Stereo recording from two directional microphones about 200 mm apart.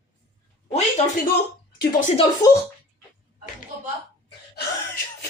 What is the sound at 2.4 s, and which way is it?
Speech, 15° left (ahead or behind).